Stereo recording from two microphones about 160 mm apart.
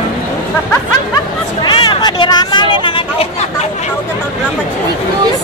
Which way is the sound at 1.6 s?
30° left (ahead or behind).